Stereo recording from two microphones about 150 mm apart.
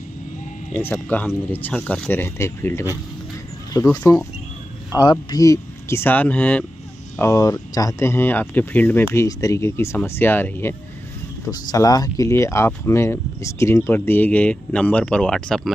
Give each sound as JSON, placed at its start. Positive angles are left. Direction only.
{"t": 0.7, "sound": "speech", "side_deg": 15}
{"t": 4.9, "sound": "speech", "side_deg": 25}
{"t": 7.2, "sound": "speech", "side_deg": 20}